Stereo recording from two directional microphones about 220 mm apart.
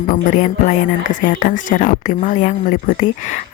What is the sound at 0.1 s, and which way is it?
Speech, 35° left (ahead or behind).